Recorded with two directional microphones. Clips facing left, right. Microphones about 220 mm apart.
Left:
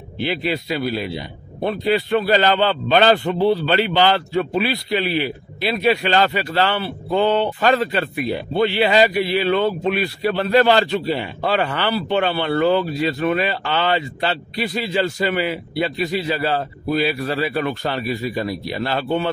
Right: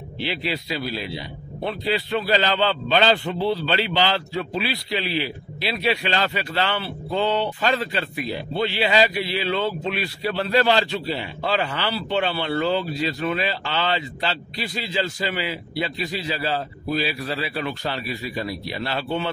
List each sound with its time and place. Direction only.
0.2 s speech: 50° left (ahead or behind)
7.1 s a man's voice: 55° left (ahead or behind)